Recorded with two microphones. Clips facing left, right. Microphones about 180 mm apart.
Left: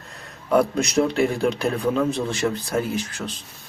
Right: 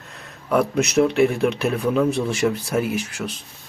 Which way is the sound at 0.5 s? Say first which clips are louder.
Right 1 dB; centre (ahead or behind).